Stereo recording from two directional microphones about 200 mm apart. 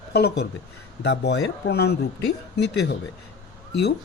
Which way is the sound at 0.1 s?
55° left (ahead or behind).